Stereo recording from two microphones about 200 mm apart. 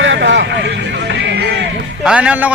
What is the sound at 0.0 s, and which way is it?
Music, 65° right (ahead or behind).